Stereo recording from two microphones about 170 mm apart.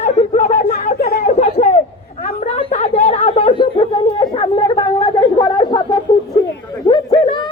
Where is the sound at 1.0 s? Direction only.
65° left (ahead or behind).